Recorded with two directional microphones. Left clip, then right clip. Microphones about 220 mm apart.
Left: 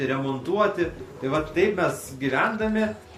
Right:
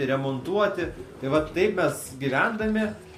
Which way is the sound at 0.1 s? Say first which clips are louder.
Even; 50° right (ahead or behind).